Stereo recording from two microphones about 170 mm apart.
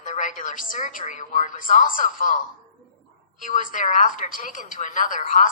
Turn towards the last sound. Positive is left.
turn(degrees=50)  # may be behind; listen again after turning